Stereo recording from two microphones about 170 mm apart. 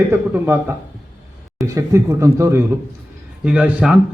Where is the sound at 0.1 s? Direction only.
10° right (ahead or behind).